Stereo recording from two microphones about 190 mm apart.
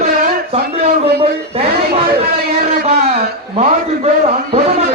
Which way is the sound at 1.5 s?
30° right (ahead or behind).